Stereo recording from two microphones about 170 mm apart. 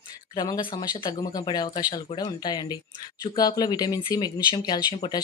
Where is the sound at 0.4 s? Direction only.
25° left (ahead or behind).